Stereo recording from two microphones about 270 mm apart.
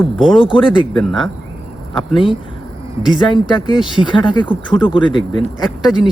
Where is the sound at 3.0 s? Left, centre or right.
Centre.